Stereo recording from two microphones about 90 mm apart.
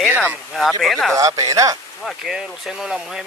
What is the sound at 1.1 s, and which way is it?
Speech, 40° right (ahead or behind).